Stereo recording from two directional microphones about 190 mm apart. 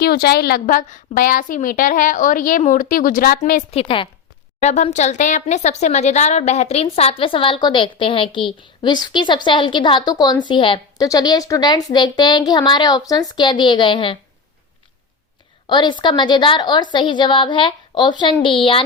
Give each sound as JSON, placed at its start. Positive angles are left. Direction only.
{"t": 0.0, "sound": "a woman's voice", "side_deg": 55}
{"t": 3.8, "sound": "a woman's voice", "side_deg": 25}
{"t": 15.7, "sound": "a woman's voice", "side_deg": 25}